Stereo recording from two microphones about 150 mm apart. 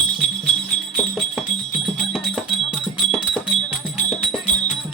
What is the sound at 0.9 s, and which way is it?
Music, 5° right (ahead or behind).